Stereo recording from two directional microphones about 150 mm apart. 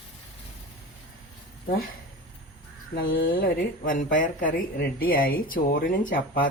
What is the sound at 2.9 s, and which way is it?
Speech, 75° left (ahead or behind).